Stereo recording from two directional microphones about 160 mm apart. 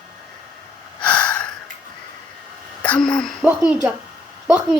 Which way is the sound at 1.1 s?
10° left (ahead or behind).